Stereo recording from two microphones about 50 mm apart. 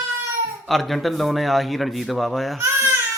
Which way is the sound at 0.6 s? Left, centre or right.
Centre.